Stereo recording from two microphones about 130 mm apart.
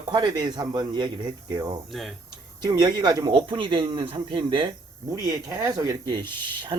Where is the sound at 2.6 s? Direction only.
35° right (ahead or behind).